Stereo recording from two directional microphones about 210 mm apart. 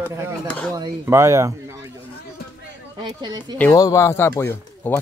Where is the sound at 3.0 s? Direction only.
20° right (ahead or behind).